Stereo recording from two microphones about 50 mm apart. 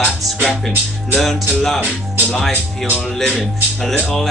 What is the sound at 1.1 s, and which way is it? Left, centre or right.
Speech, centre.